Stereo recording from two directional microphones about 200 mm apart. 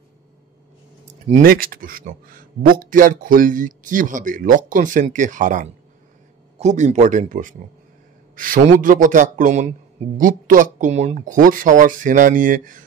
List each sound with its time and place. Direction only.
1.3 s speech: 45° right (ahead or behind)
8.8 s speech: 40° right (ahead or behind)